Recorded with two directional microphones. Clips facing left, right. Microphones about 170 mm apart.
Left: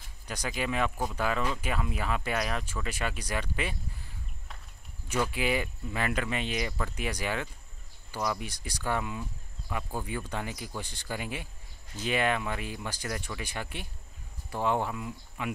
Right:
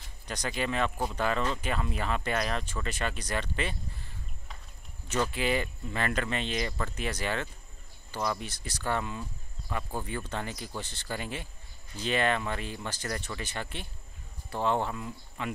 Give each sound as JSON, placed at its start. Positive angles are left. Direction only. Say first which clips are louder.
{"t": 0.3, "sound": "speech", "louder": "even", "side_deg": 10}
{"t": 5.0, "sound": "speech", "louder": "even", "side_deg": 10}